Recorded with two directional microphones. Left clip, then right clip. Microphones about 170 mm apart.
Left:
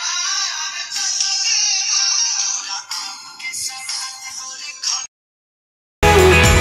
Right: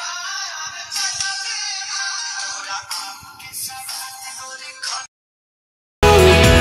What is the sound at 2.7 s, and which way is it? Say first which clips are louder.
Music: even; 55° right (ahead or behind).